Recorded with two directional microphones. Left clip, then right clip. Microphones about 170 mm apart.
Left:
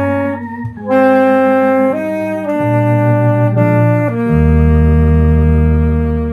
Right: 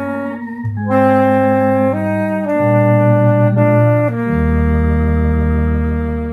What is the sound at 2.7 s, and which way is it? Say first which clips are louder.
Music: right 2 dB; 15° left (ahead or behind).